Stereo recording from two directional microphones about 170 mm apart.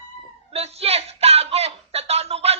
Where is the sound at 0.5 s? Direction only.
35° right (ahead or behind).